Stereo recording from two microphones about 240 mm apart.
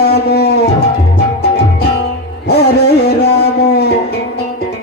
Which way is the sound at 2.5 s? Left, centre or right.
Left.